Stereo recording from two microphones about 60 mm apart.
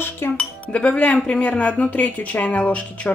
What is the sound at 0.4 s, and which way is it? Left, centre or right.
A woman's voice, left.